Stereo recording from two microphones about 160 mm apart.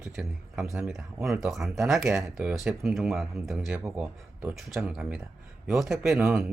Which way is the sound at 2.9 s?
5° right (ahead or behind).